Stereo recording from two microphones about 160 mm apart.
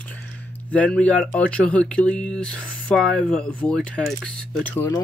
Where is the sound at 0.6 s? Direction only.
10° left (ahead or behind).